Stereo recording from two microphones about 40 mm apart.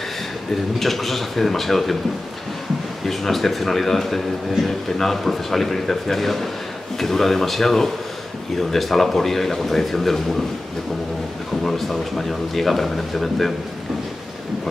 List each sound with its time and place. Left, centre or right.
0.7 s speech: centre
3.1 s speech: centre
11.6 s speech: centre